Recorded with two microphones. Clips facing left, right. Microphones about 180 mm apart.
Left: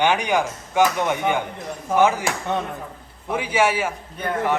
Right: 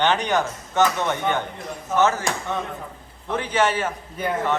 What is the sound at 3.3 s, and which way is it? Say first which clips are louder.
Speech: left 1 dB; 10° left (ahead or behind).